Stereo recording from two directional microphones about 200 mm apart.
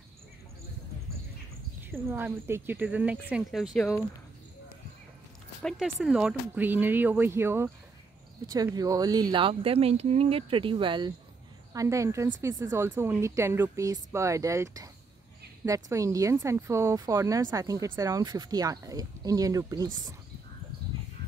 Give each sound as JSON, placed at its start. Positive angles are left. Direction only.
{"t": 1.8, "sound": "speech", "side_deg": -10}
{"t": 5.6, "sound": "speech", "side_deg": 0}